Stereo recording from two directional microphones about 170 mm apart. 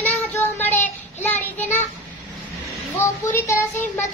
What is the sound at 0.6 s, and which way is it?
Child singing, 10° left (ahead or behind).